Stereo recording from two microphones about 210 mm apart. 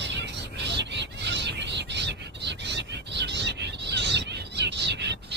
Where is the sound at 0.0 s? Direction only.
55° right (ahead or behind).